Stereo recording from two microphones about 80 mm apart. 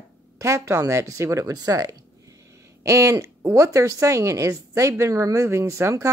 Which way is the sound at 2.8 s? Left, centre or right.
Right.